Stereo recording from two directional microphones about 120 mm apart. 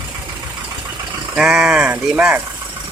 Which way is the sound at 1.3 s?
5° right (ahead or behind).